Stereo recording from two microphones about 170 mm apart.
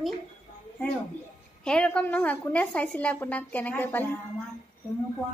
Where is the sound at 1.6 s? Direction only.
5° left (ahead or behind).